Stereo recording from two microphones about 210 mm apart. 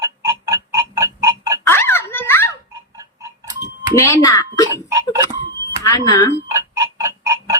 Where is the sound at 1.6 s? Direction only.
10° left (ahead or behind).